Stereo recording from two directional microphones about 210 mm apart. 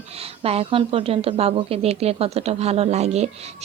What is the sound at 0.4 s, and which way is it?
A woman's voice, 30° right (ahead or behind).